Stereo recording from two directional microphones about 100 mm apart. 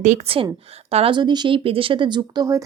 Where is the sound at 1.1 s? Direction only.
50° right (ahead or behind).